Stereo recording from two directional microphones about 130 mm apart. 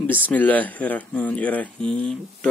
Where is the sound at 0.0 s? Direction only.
10° left (ahead or behind).